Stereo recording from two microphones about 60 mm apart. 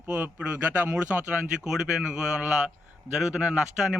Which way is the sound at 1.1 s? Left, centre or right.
Right.